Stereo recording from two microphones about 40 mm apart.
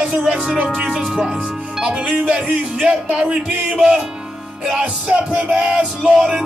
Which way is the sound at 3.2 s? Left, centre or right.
Right.